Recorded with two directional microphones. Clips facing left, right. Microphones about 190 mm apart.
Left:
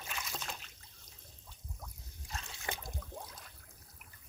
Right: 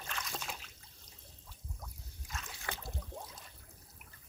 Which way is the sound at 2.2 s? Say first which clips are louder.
Left 1 dB; 30° left (ahead or behind).